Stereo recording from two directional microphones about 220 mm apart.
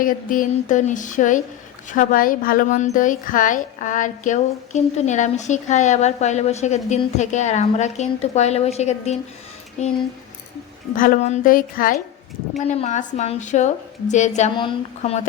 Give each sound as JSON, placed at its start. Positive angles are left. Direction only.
{"t": 0.0, "sound": "a woman's voice", "side_deg": 40}
{"t": 10.9, "sound": "a woman's voice", "side_deg": 40}